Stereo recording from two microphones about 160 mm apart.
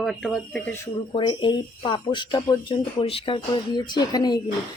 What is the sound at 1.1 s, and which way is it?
Speech, 30° left (ahead or behind).